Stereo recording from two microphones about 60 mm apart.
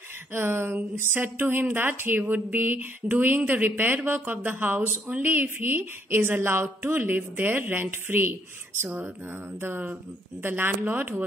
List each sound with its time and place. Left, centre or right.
0.3 s speech: right
8.8 s speech: right